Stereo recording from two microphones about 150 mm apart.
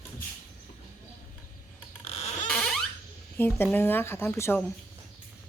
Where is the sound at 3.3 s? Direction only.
10° left (ahead or behind).